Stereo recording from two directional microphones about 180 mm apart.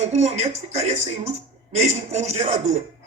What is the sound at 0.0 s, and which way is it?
Speech, 40° right (ahead or behind).